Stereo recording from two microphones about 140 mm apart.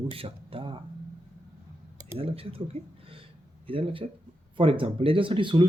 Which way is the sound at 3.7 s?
40° right (ahead or behind).